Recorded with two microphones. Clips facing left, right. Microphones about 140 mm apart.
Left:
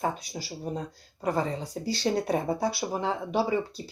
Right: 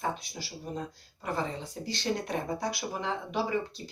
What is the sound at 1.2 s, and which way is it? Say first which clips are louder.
Speech: left 5 dB; 35° left (ahead or behind).